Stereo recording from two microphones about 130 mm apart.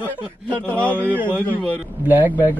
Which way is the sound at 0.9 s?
15° right (ahead or behind).